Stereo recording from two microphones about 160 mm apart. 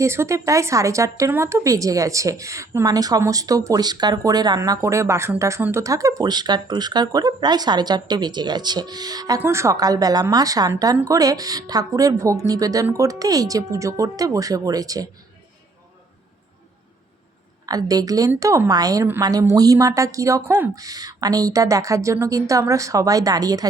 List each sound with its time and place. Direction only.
0.0 s a woman's voice: 15° right (ahead or behind)
17.7 s a woman's voice: 25° right (ahead or behind)